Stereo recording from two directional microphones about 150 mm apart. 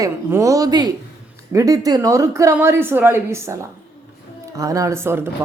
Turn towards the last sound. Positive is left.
turn(degrees=-15)  # may be behind; listen again after turning